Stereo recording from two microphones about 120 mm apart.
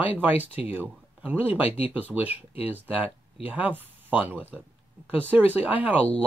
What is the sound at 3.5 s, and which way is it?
Speech, 15° right (ahead or behind).